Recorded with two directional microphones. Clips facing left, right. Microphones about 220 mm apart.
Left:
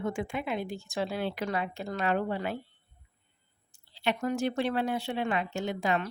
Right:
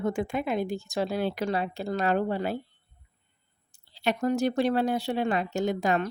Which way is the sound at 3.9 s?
40° right (ahead or behind).